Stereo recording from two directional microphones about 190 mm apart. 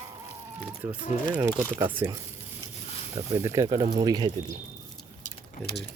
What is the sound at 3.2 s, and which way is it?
Speech, 15° right (ahead or behind).